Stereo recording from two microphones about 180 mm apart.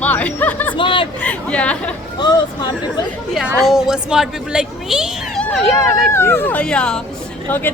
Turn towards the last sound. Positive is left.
turn(degrees=10)  # may be behind; listen again after turning